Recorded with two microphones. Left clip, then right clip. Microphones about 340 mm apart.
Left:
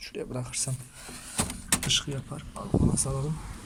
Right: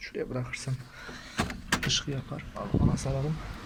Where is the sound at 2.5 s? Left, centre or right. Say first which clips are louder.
Left 2 dB; centre.